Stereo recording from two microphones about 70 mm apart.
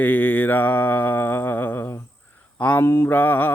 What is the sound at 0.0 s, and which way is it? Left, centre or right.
Mantra, left.